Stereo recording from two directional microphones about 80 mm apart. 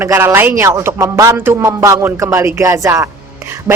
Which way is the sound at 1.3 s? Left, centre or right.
Right.